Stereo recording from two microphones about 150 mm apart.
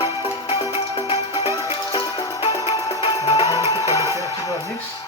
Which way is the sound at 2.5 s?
25° left (ahead or behind).